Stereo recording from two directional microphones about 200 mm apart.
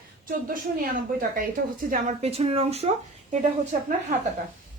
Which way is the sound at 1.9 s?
35° right (ahead or behind).